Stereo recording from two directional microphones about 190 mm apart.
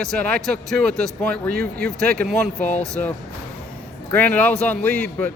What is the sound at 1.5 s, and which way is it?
Speech, 55° right (ahead or behind).